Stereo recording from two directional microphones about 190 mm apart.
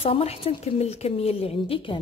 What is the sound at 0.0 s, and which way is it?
A woman's voice, 30° left (ahead or behind).